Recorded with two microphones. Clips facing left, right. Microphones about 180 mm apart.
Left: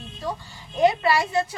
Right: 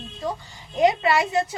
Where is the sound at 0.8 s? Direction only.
20° right (ahead or behind).